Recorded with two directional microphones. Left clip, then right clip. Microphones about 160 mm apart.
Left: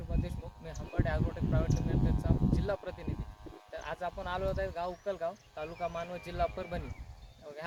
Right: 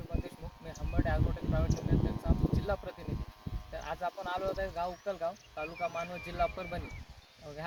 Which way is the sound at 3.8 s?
15° left (ahead or behind).